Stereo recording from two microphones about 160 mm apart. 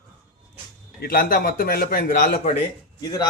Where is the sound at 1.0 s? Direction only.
65° left (ahead or behind).